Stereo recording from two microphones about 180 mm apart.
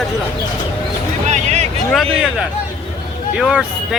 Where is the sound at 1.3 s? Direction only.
40° right (ahead or behind).